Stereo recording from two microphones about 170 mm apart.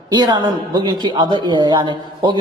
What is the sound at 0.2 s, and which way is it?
A man's voice, 25° right (ahead or behind).